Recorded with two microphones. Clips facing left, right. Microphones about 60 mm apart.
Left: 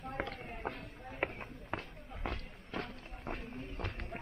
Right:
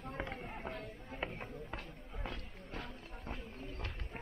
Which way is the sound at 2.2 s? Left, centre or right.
Left.